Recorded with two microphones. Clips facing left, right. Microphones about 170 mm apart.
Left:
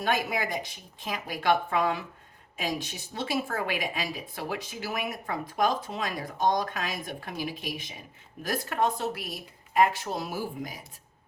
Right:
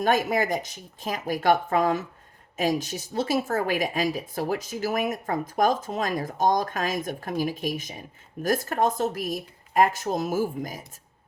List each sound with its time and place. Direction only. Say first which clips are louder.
0.0 s speech: right 6 dB; 45° right (ahead or behind)